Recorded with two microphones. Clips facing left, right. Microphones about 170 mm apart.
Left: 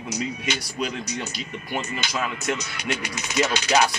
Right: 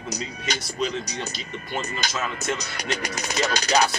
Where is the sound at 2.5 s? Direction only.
40° right (ahead or behind).